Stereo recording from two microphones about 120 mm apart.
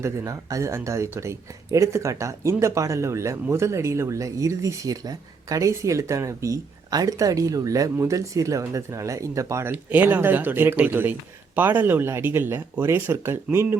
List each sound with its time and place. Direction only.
0.0 s speech: 25° right (ahead or behind)